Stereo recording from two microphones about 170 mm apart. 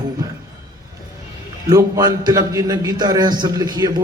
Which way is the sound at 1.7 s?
20° right (ahead or behind).